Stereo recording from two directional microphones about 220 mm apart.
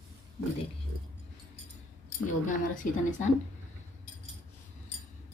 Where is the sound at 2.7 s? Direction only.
40° left (ahead or behind).